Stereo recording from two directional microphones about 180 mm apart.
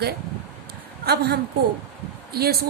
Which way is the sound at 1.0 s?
65° right (ahead or behind).